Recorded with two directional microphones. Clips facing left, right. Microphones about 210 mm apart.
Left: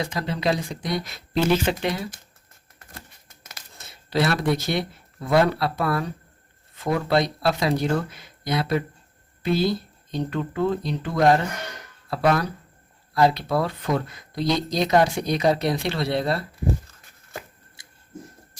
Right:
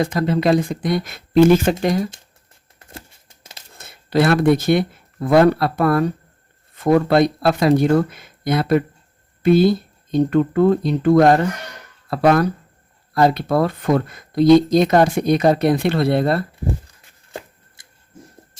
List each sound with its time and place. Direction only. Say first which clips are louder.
0.0 s speech: right 8 dB; 50° right (ahead or behind)
2.7 s tearing: right 5 dB; 30° right (ahead or behind)
3.8 s speech: right 6 dB; 55° right (ahead or behind)
17.8 s a sound: left 1 dB; 55° right (ahead or behind)